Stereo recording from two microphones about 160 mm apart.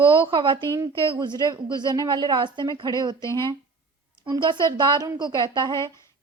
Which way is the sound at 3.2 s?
15° left (ahead or behind).